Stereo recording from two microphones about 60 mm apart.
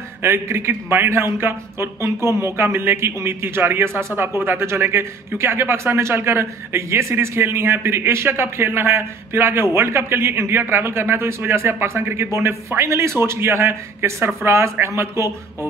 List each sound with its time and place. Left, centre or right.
0.2 s a man's voice: right